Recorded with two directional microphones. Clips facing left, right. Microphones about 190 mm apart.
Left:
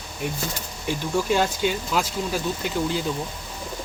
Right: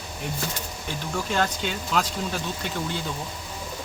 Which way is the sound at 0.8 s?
10° left (ahead or behind).